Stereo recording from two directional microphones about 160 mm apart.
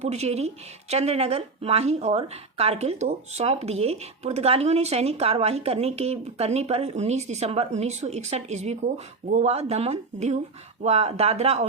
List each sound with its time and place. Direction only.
0.0 s speech: 40° right (ahead or behind)